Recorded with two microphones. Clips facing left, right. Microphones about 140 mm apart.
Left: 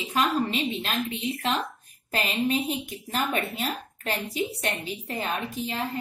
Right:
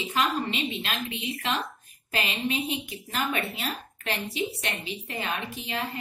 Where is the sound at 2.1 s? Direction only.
40° left (ahead or behind).